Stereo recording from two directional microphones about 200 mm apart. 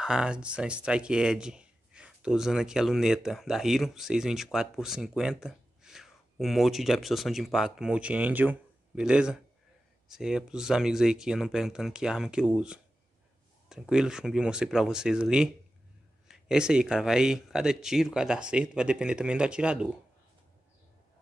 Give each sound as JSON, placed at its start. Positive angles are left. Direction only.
{"t": 0.0, "sound": "speech", "side_deg": -5}